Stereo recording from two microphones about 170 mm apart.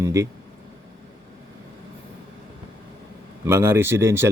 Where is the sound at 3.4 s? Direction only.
15° right (ahead or behind).